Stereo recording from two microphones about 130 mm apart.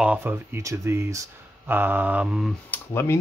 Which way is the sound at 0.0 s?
10° right (ahead or behind).